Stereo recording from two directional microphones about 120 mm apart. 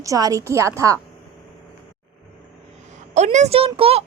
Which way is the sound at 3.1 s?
80° right.